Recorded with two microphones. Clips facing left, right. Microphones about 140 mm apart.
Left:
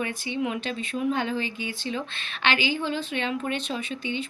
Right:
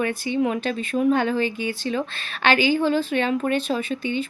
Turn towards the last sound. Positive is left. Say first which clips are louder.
# right 6 dB
turn(degrees=-45)  # may be behind; listen again after turning